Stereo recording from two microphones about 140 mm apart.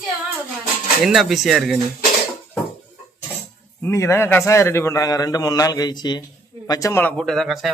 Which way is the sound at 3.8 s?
20° left (ahead or behind).